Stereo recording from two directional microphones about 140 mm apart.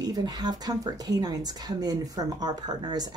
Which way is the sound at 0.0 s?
30° right (ahead or behind).